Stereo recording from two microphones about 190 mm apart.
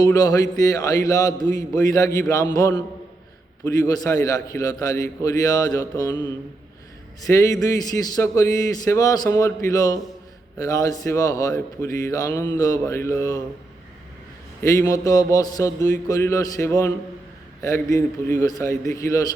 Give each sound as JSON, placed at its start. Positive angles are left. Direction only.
{"t": 0.0, "sound": "a man's voice", "side_deg": 20}
{"t": 7.3, "sound": "a man's voice", "side_deg": 20}
{"t": 14.6, "sound": "speech", "side_deg": 15}